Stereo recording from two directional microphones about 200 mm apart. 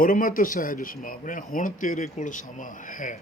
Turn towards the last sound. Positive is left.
turn(degrees=40)  # may be behind; listen again after turning